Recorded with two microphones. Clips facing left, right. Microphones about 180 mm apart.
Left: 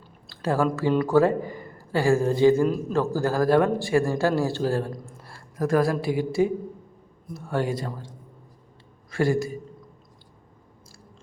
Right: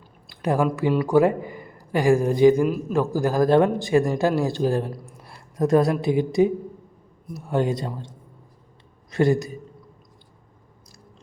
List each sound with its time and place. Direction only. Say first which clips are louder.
0.3 s a man's voice: right 2 dB; 15° right (ahead or behind)